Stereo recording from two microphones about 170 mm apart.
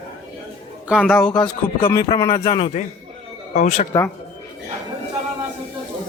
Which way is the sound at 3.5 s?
45° left (ahead or behind).